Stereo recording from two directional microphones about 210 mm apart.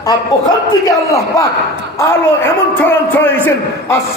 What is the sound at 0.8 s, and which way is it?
A man's voice, 15° left (ahead or behind).